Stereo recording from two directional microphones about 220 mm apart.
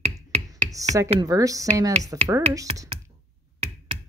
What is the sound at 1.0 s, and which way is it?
Speech, 15° right (ahead or behind).